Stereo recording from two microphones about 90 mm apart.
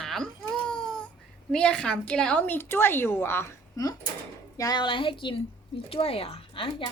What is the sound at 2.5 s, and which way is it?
Speech, 25° left (ahead or behind).